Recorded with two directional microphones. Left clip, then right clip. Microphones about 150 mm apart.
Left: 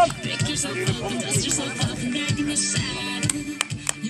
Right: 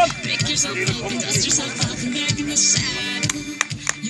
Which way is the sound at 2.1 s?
40° left (ahead or behind).